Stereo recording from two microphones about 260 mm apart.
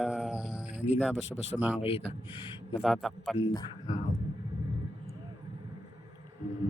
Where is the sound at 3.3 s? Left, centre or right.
Centre.